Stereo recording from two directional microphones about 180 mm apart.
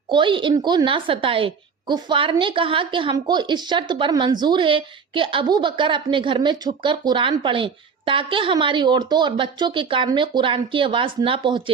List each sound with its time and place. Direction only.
0.1 s a woman's voice: 25° right (ahead or behind)